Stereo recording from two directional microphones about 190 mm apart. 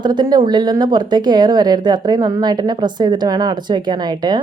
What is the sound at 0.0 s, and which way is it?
A woman's voice, 20° right (ahead or behind).